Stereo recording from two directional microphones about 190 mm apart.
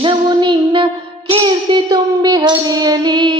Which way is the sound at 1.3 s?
25° right (ahead or behind).